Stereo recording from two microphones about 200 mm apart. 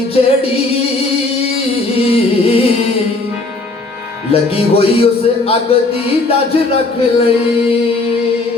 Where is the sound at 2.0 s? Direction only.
30° left (ahead or behind).